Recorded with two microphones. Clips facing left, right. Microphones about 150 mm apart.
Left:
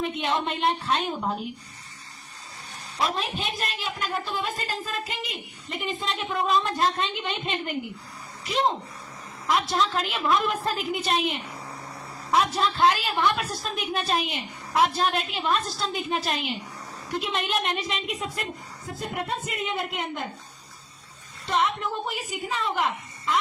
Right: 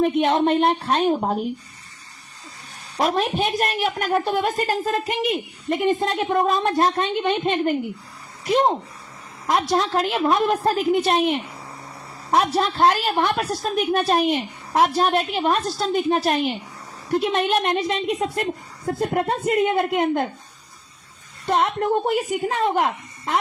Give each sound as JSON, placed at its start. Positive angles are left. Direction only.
{"t": 0.0, "sound": "a woman's voice", "side_deg": -50}
{"t": 3.0, "sound": "a woman's voice", "side_deg": -50}
{"t": 12.4, "sound": "a woman's voice", "side_deg": -60}
{"t": 21.4, "sound": "a woman's voice", "side_deg": -55}